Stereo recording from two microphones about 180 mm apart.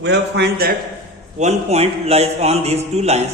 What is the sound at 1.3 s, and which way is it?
A man's voice, 40° right (ahead or behind).